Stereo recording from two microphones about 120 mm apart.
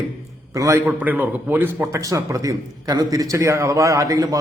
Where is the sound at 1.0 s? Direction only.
15° right (ahead or behind).